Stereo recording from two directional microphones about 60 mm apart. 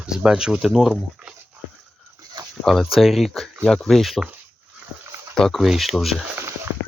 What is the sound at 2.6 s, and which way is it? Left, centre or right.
Speech, centre.